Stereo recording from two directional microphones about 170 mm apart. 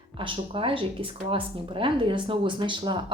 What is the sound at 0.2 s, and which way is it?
Speech, 30° right (ahead or behind).